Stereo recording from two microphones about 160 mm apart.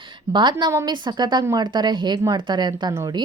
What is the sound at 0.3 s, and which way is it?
Speech, 30° right (ahead or behind).